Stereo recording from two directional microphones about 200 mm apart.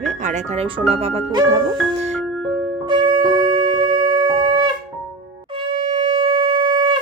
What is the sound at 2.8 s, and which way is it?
Wind instrument, 20° right (ahead or behind).